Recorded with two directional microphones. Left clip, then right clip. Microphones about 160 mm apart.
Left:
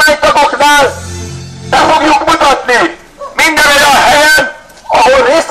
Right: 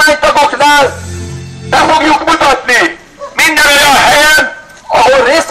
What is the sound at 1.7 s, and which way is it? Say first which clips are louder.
Music: even; 20° right (ahead or behind).